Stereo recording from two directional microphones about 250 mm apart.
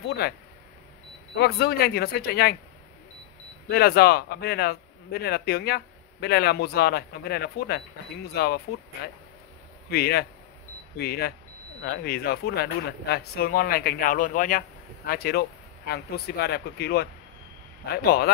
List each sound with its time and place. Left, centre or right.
0.0 s speech: left
1.3 s speech: left
3.6 s speech: left
9.8 s speech: left